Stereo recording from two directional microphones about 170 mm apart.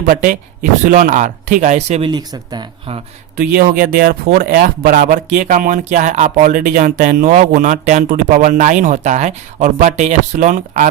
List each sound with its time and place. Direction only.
0.1 s speech: 55° right (ahead or behind)
2.0 s speech: 25° right (ahead or behind)
3.3 s speech: 55° right (ahead or behind)